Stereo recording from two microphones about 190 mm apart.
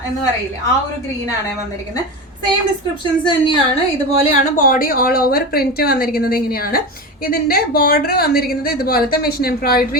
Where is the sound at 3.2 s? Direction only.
25° left (ahead or behind).